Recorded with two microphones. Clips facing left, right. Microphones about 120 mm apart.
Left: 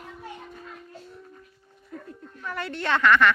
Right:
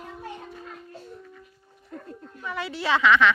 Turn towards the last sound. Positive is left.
turn(degrees=0)  # may be behind; listen again after turning